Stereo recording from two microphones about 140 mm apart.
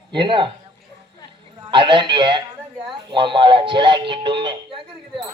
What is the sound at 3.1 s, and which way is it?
Music, 35° right (ahead or behind).